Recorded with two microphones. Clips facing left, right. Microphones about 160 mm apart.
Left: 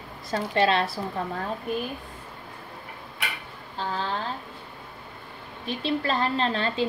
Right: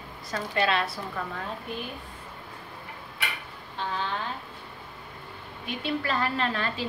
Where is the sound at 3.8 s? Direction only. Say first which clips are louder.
Left 2 dB; 35° left (ahead or behind).